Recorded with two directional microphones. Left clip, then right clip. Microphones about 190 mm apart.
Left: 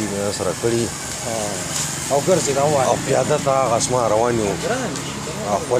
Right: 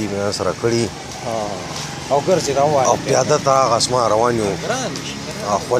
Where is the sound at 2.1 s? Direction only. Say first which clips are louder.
Right 2 dB; 20° right (ahead or behind).